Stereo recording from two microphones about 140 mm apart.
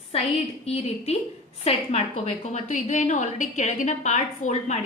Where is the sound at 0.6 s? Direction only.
50° left (ahead or behind).